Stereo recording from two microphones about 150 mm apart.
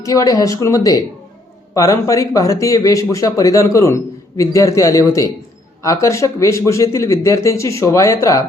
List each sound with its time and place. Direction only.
0.0 s speech: 25° left (ahead or behind)